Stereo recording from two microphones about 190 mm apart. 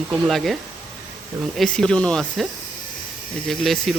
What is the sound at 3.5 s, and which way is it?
Speech, centre (ahead or behind).